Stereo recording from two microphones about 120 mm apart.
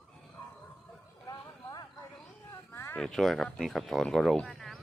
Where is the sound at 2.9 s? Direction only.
5° left (ahead or behind).